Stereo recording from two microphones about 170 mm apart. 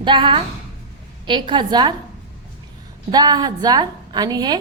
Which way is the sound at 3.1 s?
25° right (ahead or behind).